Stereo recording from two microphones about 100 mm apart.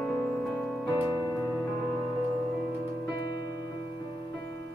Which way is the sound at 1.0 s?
45° left (ahead or behind).